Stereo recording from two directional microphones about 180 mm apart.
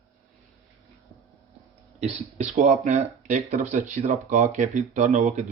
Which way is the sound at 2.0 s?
40° right (ahead or behind).